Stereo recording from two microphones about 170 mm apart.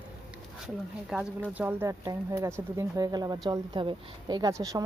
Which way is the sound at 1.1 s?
5° right (ahead or behind).